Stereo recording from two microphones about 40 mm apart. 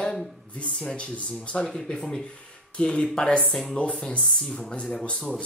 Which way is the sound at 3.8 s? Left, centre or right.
Left.